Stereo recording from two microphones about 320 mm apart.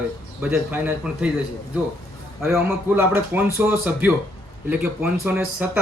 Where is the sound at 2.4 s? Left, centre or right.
Centre.